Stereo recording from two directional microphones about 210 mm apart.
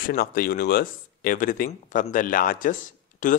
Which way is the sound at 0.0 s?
45° left (ahead or behind).